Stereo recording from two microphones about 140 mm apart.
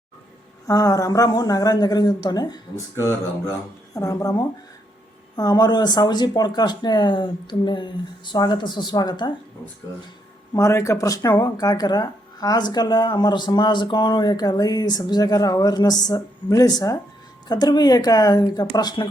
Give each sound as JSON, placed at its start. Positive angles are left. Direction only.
{"t": 0.7, "sound": "speech", "side_deg": 25}
{"t": 10.5, "sound": "speech", "side_deg": 20}